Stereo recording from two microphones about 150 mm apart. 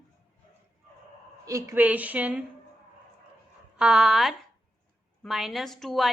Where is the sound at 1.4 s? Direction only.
20° right (ahead or behind).